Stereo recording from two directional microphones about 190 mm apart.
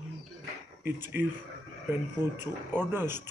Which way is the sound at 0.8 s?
10° right (ahead or behind).